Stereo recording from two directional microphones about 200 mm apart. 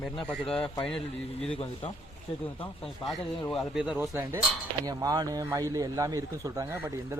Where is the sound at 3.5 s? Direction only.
Centre (ahead or behind).